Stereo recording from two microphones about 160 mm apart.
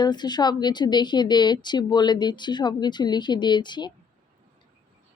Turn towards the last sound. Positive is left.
turn(degrees=30)  # may be behind; listen again after turning